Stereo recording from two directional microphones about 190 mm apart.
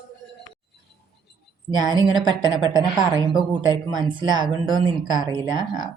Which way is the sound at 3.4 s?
25° right (ahead or behind).